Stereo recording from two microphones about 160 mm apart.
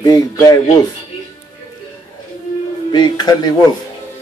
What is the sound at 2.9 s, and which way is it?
Speech, 25° left (ahead or behind).